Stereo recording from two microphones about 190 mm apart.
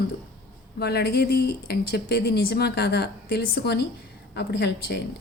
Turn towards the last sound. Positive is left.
turn(degrees=60)  # may be behind; listen again after turning